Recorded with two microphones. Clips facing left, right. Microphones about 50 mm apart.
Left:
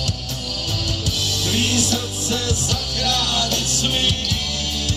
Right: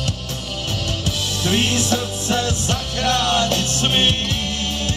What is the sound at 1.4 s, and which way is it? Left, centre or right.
Music, right.